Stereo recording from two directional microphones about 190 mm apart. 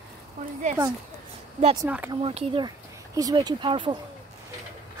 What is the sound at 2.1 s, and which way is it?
Speech, 30° right (ahead or behind).